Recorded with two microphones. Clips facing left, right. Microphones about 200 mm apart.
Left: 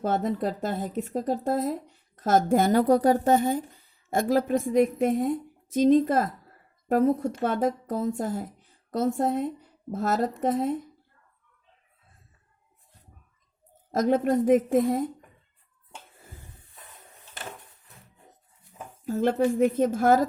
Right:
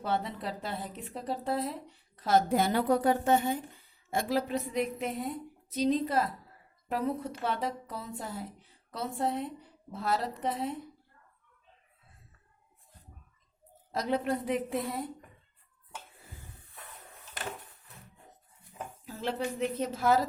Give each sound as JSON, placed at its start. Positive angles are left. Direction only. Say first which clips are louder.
{"t": 0.0, "sound": "speech", "louder": "left 7 dB", "side_deg": 45}
{"t": 13.9, "sound": "speech", "louder": "left 8 dB", "side_deg": 45}
{"t": 19.0, "sound": "speech", "louder": "left 11 dB", "side_deg": 50}